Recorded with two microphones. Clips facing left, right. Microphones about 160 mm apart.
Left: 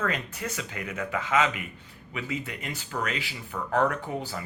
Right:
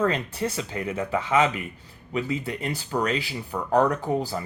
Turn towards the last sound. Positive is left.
turn(degrees=-35)  # may be behind; listen again after turning